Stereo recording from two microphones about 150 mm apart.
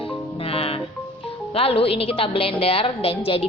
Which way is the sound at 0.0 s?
40° left (ahead or behind).